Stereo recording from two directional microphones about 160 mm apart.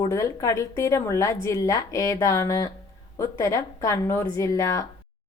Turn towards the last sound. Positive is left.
turn(degrees=20)  # may be behind; listen again after turning